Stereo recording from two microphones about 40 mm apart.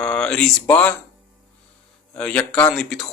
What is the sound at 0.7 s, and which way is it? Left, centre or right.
Speech, left.